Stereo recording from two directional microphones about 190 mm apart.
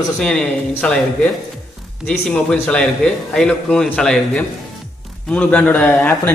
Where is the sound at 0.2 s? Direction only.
5° left (ahead or behind).